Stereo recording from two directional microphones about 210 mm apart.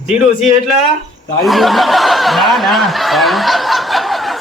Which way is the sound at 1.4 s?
Centre (ahead or behind).